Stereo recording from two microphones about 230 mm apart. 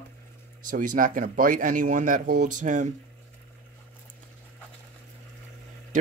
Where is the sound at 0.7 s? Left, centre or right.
Right.